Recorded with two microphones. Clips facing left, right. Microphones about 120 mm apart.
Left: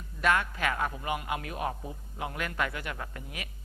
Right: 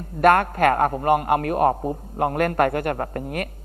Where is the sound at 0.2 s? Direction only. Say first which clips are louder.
Right 12 dB; 55° right (ahead or behind).